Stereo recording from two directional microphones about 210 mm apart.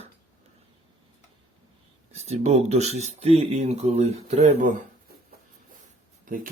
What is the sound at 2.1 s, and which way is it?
Speech, 30° right (ahead or behind).